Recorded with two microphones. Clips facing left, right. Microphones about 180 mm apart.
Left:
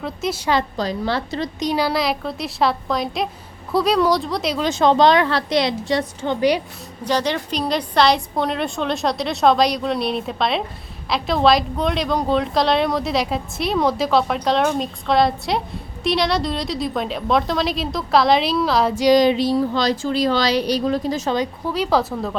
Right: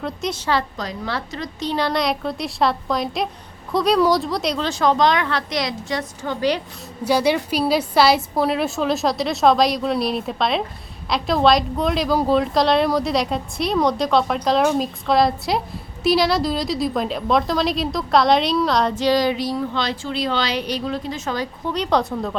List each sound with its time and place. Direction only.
0.0 s a woman's voice: 5° left (ahead or behind)
0.8 s a woman's voice: 30° left (ahead or behind)
1.5 s speech: 10° left (ahead or behind)
4.6 s a woman's voice: 25° left (ahead or behind)
7.0 s speech: 10° right (ahead or behind); by 21.2 s 40° left (ahead or behind)
21.2 s a woman's voice: 20° left (ahead or behind)
21.7 s speech: 5° left (ahead or behind)